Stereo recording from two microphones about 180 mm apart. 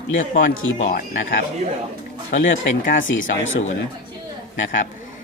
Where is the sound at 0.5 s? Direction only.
90° left.